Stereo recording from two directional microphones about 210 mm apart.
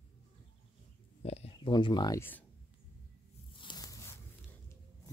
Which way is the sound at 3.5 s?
20° left (ahead or behind).